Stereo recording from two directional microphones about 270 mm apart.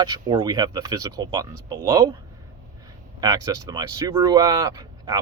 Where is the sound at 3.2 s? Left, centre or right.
Centre.